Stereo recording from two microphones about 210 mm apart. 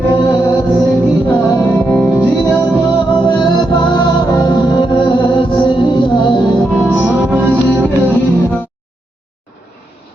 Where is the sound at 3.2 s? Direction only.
20° left (ahead or behind).